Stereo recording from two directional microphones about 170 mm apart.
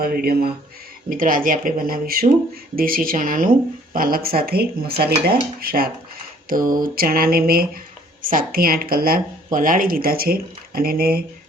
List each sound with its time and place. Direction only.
0.0 s speech: 65° right (ahead or behind)